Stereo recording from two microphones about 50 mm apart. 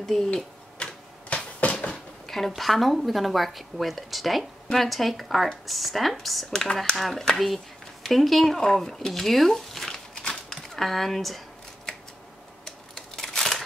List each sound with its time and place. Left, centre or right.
0.1 s a woman's voice: centre
1.3 s cupboard open or close: left
2.2 s a woman's voice: centre
10.3 s a sound: centre
12.6 s scissors: centre